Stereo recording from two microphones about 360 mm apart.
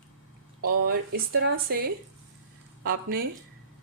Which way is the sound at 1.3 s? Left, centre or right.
Right.